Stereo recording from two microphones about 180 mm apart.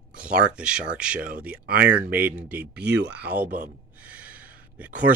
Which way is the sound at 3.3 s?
60° right (ahead or behind).